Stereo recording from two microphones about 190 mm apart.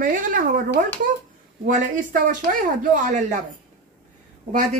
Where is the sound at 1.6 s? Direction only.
45° right (ahead or behind).